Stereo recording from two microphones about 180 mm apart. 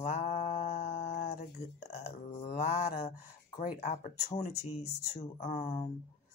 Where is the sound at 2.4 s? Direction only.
40° left (ahead or behind).